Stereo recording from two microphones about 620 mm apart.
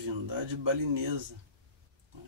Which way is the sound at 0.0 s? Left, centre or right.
Right.